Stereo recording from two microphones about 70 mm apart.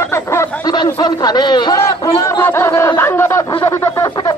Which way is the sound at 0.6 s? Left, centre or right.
Left.